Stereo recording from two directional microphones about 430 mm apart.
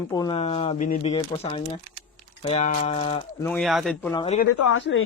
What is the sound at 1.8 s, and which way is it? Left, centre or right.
Crumpling, right.